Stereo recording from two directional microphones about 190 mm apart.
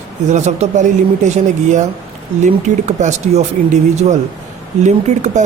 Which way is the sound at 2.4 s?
40° right (ahead or behind).